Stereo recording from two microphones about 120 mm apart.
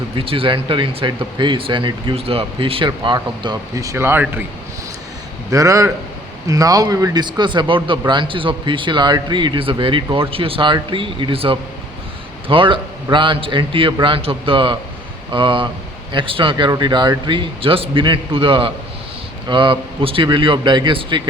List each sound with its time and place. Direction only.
0.2 s a man's voice: 50° right (ahead or behind)
2.1 s speech: 50° right (ahead or behind); by 4.4 s 15° right (ahead or behind)
5.5 s a man's voice: 25° right (ahead or behind); by 21.2 s 40° right (ahead or behind)